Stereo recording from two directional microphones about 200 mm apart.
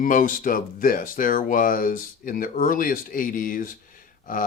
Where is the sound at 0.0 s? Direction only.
45° left (ahead or behind).